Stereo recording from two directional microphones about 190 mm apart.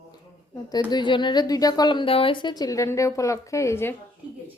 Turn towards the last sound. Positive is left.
turn(degrees=15)  # may be behind; listen again after turning